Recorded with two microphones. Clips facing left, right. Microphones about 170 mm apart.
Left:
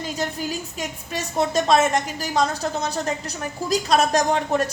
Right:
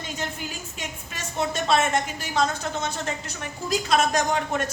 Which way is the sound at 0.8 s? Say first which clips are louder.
Left 7 dB; 40° left (ahead or behind).